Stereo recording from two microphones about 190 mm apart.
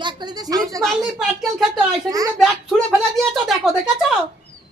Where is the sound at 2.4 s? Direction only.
Centre (ahead or behind).